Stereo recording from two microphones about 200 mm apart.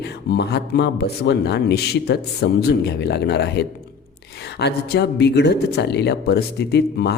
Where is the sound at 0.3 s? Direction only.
55° left (ahead or behind).